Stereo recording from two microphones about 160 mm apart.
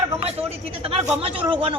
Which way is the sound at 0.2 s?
40° right (ahead or behind).